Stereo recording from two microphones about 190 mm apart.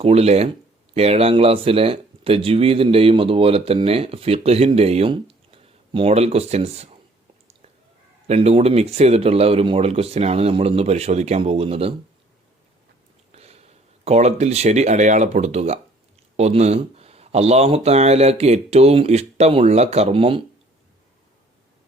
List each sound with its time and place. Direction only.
0.0 s speech: 30° right (ahead or behind)
8.3 s speech: 30° right (ahead or behind)
13.3 s speech: 35° right (ahead or behind)